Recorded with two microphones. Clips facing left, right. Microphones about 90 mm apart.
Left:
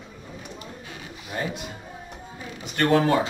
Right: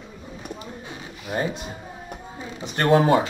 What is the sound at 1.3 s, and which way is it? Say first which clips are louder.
Speech: right 4 dB; 30° right (ahead or behind).